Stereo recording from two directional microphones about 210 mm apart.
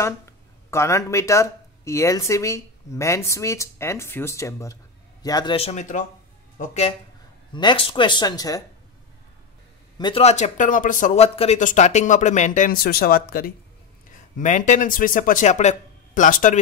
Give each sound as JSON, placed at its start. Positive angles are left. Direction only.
{"t": 0.0, "sound": "speech", "side_deg": 15}
{"t": 9.9, "sound": "speech", "side_deg": 25}